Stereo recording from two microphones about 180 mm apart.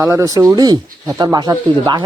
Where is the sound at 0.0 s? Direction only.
15° right (ahead or behind).